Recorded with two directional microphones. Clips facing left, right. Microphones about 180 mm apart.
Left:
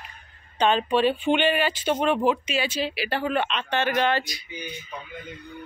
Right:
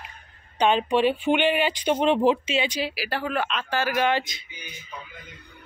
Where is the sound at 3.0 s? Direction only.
Centre (ahead or behind).